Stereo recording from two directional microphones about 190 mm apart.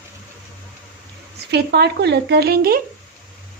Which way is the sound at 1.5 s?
60° right (ahead or behind).